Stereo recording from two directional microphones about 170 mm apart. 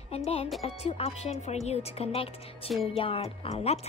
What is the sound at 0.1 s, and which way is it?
Speech, 35° left (ahead or behind).